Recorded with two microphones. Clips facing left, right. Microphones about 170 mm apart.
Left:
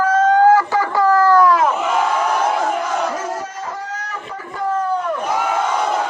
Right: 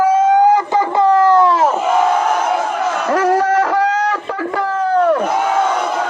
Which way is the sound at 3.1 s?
70° right (ahead or behind).